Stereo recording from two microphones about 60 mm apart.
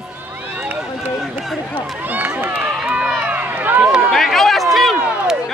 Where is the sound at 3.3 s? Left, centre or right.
Right.